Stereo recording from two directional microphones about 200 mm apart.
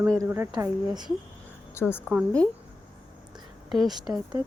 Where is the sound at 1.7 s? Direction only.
10° left (ahead or behind).